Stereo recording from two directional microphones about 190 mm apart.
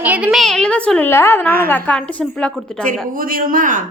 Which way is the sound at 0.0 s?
5° right (ahead or behind).